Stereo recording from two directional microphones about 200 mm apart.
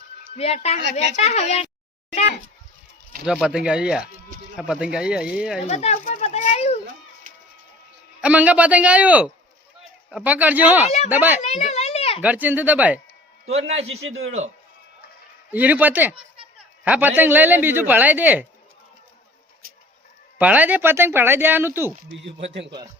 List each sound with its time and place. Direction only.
0.3 s a child's voice: 30° left (ahead or behind)
3.2 s speech: 5° right (ahead or behind)
5.6 s a sound: 30° left (ahead or behind)
8.2 s a man's voice: 5° right (ahead or behind)
11.4 s a sound: 35° left (ahead or behind)
12.2 s a man's voice: 10° right (ahead or behind)
13.7 s a man's voice: 30° right (ahead or behind)
15.5 s a man's voice: 10° right (ahead or behind)
20.4 s a man's voice: 5° right (ahead or behind)
22.3 s speech: 30° right (ahead or behind)